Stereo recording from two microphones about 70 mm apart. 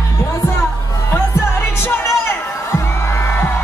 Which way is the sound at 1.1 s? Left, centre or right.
Left.